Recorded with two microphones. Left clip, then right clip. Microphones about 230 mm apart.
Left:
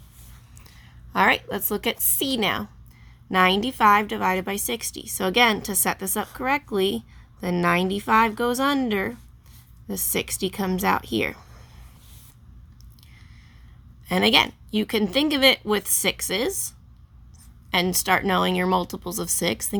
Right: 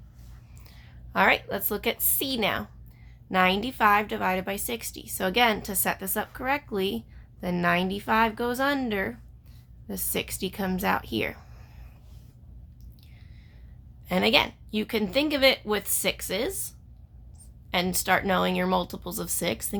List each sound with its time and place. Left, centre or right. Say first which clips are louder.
0.6 s a woman's voice: left 1 dB; left
14.1 s a woman's voice: left 3 dB; left
17.7 s a woman's voice: left 3 dB; left